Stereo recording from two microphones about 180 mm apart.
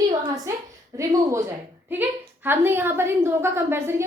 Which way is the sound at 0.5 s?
15° right (ahead or behind).